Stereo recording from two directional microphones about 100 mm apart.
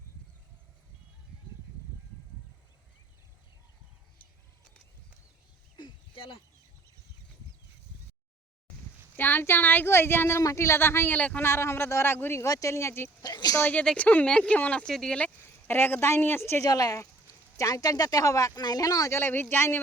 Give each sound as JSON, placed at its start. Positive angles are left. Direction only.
{"t": 5.7, "sound": "a sound", "side_deg": 55}
{"t": 9.1, "sound": "speech", "side_deg": 20}
{"t": 13.2, "sound": "speech", "side_deg": 40}
{"t": 13.6, "sound": "speech", "side_deg": 15}
{"t": 15.4, "sound": "speech", "side_deg": 20}
{"t": 16.6, "sound": "speech", "side_deg": 35}